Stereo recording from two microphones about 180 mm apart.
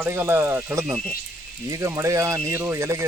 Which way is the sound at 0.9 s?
Centre (ahead or behind).